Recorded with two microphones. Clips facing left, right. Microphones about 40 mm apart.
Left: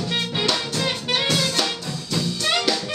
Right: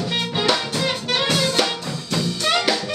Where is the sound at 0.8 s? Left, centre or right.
Centre.